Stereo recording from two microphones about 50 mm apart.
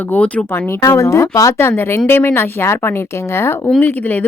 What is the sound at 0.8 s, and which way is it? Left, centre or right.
A woman's voice, left.